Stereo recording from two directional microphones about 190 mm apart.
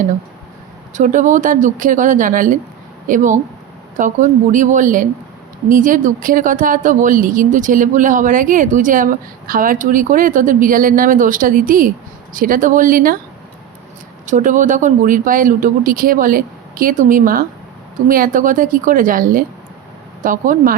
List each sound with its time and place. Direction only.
0.9 s a woman's voice: 40° right (ahead or behind)
14.3 s a woman's voice: 40° right (ahead or behind)